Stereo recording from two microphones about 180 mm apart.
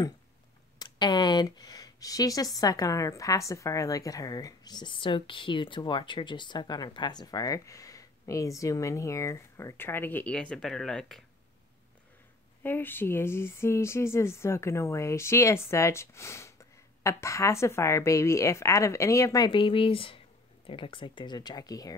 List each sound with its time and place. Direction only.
0.7 s speech: 25° left (ahead or behind); by 11.2 s 5° left (ahead or behind)
12.6 s speech: 10° left (ahead or behind)